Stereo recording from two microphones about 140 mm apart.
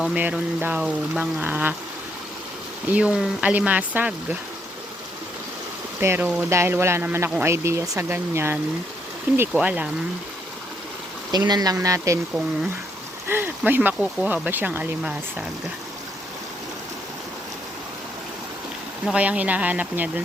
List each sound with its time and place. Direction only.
0.0 s speech: 10° right (ahead or behind)
2.9 s speech: 10° right (ahead or behind)
6.0 s speech: 15° right (ahead or behind)
11.3 s speech: 30° right (ahead or behind)
13.2 s speech: 15° right (ahead or behind)
19.0 s speech: 10° right (ahead or behind)